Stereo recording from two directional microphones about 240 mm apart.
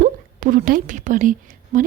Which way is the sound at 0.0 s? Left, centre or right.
Right.